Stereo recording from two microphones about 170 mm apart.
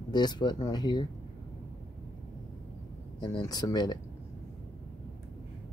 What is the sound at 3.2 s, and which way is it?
Speech, 25° left (ahead or behind).